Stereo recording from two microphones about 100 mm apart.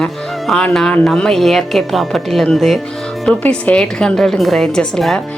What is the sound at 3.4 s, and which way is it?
A woman's voice, 10° left (ahead or behind).